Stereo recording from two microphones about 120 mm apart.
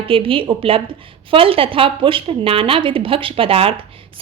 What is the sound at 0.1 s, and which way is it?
Speech, 50° right (ahead or behind).